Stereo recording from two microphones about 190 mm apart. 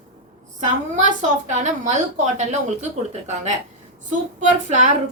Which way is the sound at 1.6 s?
40° right (ahead or behind).